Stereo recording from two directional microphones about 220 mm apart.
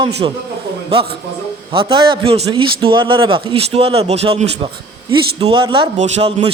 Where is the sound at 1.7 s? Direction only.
25° right (ahead or behind).